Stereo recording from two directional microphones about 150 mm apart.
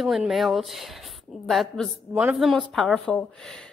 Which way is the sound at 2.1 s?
10° right (ahead or behind).